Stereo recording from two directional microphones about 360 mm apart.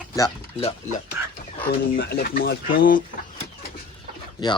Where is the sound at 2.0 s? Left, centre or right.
Left.